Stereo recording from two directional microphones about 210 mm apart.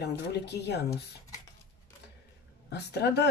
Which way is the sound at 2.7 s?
55° left (ahead or behind).